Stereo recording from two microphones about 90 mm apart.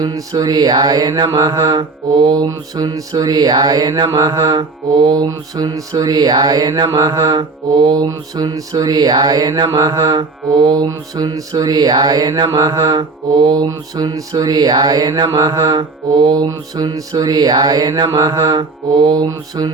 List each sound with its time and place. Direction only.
0.0 s mantra: 45° right (ahead or behind)